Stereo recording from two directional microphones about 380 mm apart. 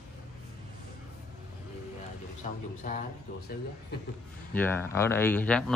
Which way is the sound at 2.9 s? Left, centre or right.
Left.